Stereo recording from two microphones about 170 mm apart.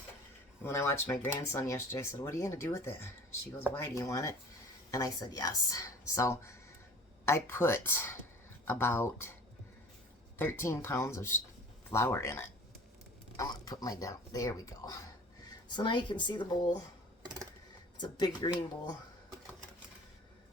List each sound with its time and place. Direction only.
0.6 s speech: 15° left (ahead or behind)
10.3 s speech: 15° left (ahead or behind)
18.0 s speech: 25° left (ahead or behind)